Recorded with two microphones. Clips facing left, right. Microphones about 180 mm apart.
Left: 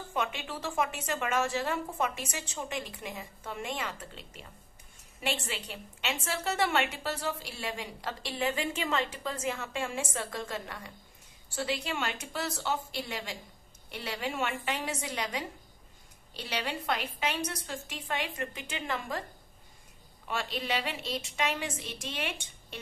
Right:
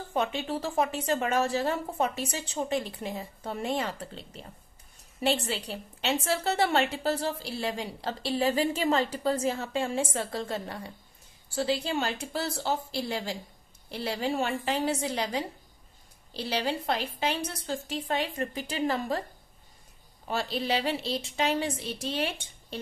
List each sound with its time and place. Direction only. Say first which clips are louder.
0.1 s a woman's voice: right 5 dB; 35° right (ahead or behind)
20.2 s a woman's voice: right 4 dB; 35° right (ahead or behind)